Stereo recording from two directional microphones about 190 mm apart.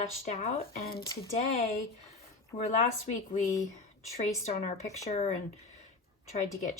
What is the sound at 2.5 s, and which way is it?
A woman's voice, 40° left (ahead or behind).